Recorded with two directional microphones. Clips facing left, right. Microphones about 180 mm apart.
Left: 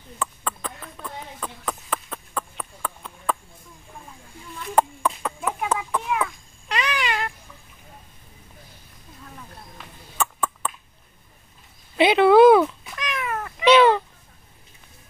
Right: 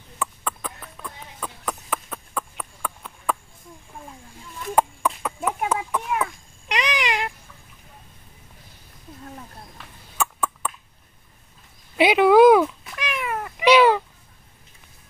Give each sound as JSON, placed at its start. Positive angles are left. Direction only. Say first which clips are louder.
{"t": 0.2, "sound": "a sound", "louder": "even", "side_deg": -10}
{"t": 4.7, "sound": "a sound", "louder": "even", "side_deg": -5}
{"t": 6.2, "sound": "babbling", "louder": "even", "side_deg": -15}
{"t": 10.1, "sound": "throat clearing", "louder": "even", "side_deg": -10}
{"t": 12.0, "sound": "speech", "louder": "even", "side_deg": -10}
{"t": 12.6, "sound": "cat", "louder": "right 1 dB", "side_deg": -5}